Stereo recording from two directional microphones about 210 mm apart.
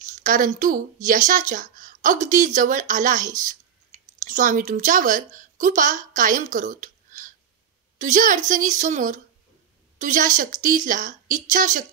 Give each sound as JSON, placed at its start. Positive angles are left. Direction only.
{"t": 0.0, "sound": "a woman's voice", "side_deg": -40}